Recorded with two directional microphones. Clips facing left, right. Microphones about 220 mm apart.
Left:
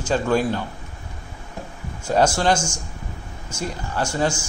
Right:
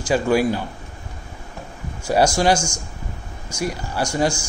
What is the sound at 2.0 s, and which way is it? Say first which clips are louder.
A man's voice: right 2 dB; 10° right (ahead or behind).